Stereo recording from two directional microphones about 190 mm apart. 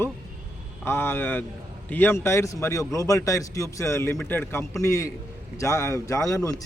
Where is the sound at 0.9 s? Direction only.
10° left (ahead or behind).